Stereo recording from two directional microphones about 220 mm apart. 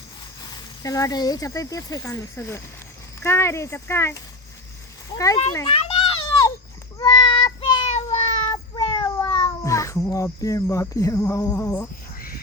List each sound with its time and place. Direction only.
0.4 s speech: 15° left (ahead or behind)
5.6 s children playing: 25° left (ahead or behind)
7.0 s child singing: 20° left (ahead or behind)
7.9 s meow: 25° left (ahead or behind); by 11.9 s 10° left (ahead or behind)